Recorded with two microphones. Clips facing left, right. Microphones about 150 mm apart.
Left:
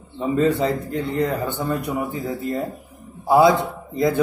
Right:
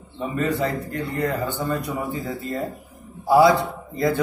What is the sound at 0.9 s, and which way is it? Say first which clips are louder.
A man's voice: left 3 dB; 15° left (ahead or behind).